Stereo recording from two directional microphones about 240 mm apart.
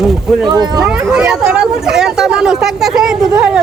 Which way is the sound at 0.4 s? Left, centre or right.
Centre.